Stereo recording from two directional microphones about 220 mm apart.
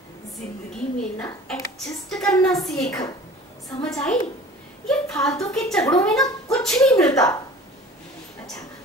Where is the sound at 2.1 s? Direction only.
Centre (ahead or behind).